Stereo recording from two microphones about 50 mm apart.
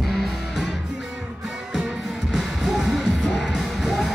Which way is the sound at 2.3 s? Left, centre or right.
Centre.